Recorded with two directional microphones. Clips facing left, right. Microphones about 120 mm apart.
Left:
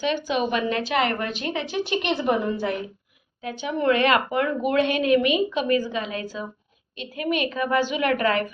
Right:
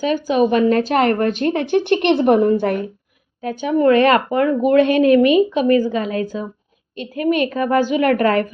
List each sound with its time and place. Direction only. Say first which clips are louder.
0.0 s a woman's voice: right 7 dB; 45° right (ahead or behind)